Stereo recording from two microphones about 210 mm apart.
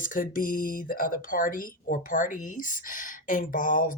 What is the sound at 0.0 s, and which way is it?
Speech, 40° left (ahead or behind).